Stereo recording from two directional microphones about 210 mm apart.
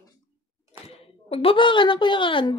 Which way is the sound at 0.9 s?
25° left (ahead or behind).